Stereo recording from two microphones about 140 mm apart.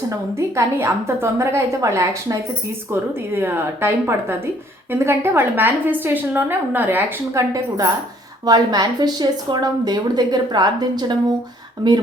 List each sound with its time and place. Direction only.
0.3 s a woman's voice: 20° right (ahead or behind)